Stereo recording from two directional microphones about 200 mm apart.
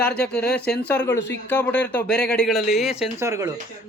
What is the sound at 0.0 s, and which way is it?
Speech, 5° left (ahead or behind).